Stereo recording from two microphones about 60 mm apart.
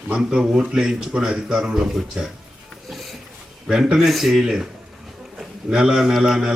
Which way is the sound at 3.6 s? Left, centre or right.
Centre.